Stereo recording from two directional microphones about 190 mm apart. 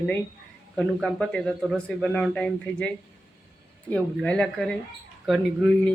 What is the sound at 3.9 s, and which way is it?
Speech, 5° left (ahead or behind).